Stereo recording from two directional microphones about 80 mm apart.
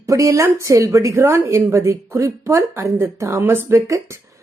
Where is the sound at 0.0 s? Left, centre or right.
Right.